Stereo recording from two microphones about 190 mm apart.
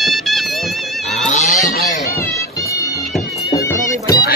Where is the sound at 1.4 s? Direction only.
Centre (ahead or behind).